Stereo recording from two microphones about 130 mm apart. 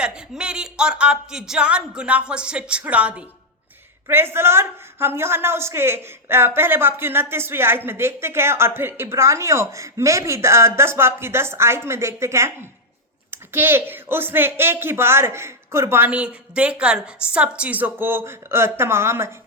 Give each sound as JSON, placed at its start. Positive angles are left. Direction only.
{"t": 0.0, "sound": "a woman's voice", "side_deg": -5}